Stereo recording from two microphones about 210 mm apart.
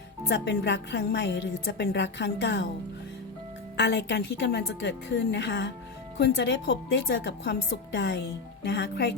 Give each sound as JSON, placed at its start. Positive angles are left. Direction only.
{"t": 0.3, "sound": "a woman's voice", "side_deg": 55}
{"t": 3.8, "sound": "a woman's voice", "side_deg": 55}